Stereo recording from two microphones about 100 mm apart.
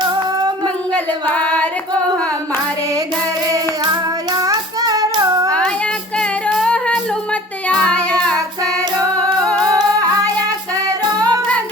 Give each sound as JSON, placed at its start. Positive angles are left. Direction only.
{"t": 0.0, "sound": "child singing", "side_deg": -40}
{"t": 0.9, "sound": "female singing", "side_deg": 15}
{"t": 4.3, "sound": "child singing", "side_deg": -40}
{"t": 5.5, "sound": "child singing", "side_deg": 10}
{"t": 6.1, "sound": "female singing", "side_deg": 10}
{"t": 9.4, "sound": "music", "side_deg": 10}
{"t": 10.8, "sound": "music", "side_deg": -40}